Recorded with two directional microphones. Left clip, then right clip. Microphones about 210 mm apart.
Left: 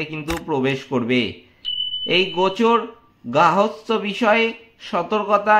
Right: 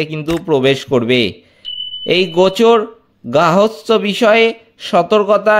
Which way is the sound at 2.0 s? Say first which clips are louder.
Right 7 dB; 40° right (ahead or behind).